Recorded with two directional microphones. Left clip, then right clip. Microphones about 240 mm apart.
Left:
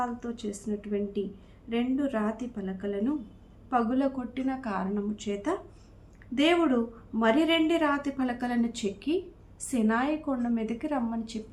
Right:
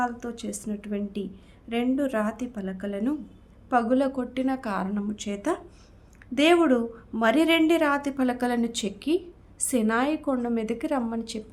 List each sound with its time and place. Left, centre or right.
0.0 s a woman's voice: right